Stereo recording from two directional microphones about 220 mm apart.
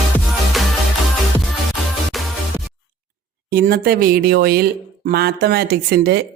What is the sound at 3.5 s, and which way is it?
Speech, 45° right (ahead or behind).